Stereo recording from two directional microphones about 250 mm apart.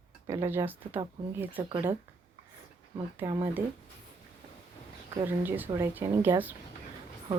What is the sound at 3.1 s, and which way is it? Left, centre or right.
Speech, centre.